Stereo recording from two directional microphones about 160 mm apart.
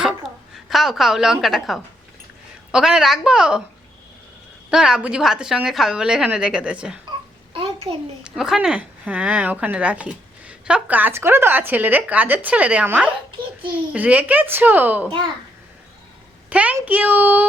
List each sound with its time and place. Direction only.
0.5 s a woman's voice: centre (ahead or behind)
4.7 s a woman's voice: 5° right (ahead or behind)
8.2 s speech: 5° right (ahead or behind)
16.5 s speech: 10° right (ahead or behind)